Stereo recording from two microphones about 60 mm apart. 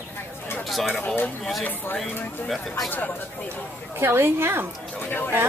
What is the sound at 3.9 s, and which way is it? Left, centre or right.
Speech, right.